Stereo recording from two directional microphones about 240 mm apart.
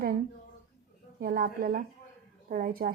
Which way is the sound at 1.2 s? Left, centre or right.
Right.